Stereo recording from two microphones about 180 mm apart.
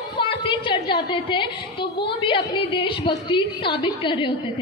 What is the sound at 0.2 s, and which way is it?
A woman's voice, 30° left (ahead or behind).